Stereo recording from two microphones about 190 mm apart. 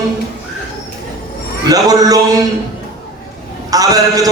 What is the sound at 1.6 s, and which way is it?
Speech, 20° right (ahead or behind).